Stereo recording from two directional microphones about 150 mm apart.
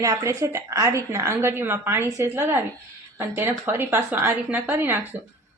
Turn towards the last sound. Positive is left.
turn(degrees=-15)  # may be behind; listen again after turning